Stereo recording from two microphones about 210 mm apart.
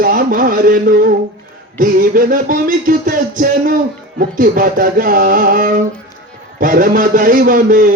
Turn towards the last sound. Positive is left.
turn(degrees=-40)  # may be behind; listen again after turning